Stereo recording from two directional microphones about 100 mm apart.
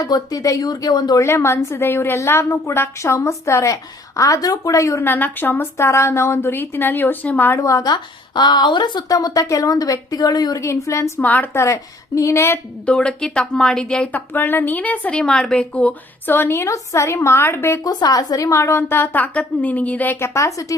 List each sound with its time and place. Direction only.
0.0 s speech: 40° left (ahead or behind)
1.2 s a woman's voice: 25° left (ahead or behind)
5.0 s a woman's voice: 20° left (ahead or behind)
7.6 s speech: 35° left (ahead or behind)
7.9 s speech: 45° left (ahead or behind)
10.6 s speech: 30° left (ahead or behind)
11.2 s a woman's voice: 15° left (ahead or behind)
11.6 s a woman's voice: 30° left (ahead or behind)
12.8 s a woman's voice: 10° left (ahead or behind)
14.3 s a woman's voice: 20° left (ahead or behind)
17.8 s a woman's voice: 40° left (ahead or behind)